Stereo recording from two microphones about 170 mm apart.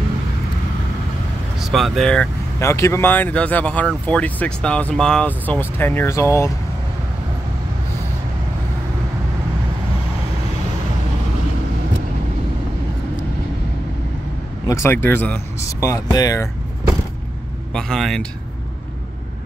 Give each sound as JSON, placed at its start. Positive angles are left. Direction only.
{"t": 1.6, "sound": "speech", "side_deg": 0}
{"t": 2.6, "sound": "speech", "side_deg": 15}
{"t": 14.7, "sound": "speech", "side_deg": 15}
{"t": 17.7, "sound": "speech", "side_deg": 0}